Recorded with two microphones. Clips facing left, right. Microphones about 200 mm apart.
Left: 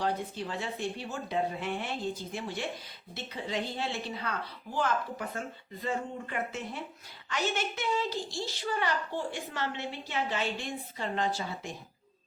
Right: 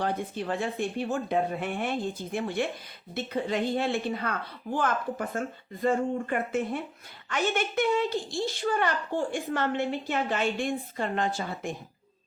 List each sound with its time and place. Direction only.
0.0 s a woman's voice: 55° right (ahead or behind)